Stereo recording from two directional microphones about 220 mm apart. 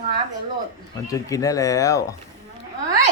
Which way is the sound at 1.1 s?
15° left (ahead or behind).